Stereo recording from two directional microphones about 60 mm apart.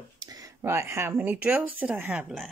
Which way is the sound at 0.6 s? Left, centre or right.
Right.